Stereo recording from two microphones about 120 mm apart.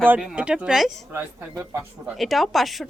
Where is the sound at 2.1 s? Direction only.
Centre (ahead or behind).